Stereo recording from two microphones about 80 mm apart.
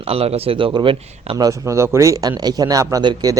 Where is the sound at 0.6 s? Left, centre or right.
Right.